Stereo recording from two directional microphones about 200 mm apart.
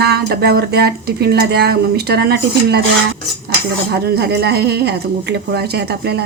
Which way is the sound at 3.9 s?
55° right (ahead or behind).